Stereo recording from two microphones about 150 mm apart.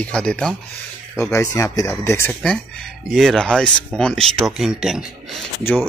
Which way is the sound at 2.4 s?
5° left (ahead or behind).